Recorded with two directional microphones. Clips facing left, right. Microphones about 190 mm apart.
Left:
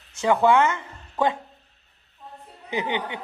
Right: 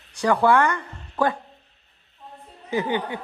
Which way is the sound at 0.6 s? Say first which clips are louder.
Even; 20° left (ahead or behind).